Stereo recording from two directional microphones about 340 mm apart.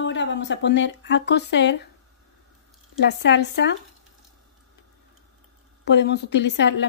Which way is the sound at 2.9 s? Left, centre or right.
Left.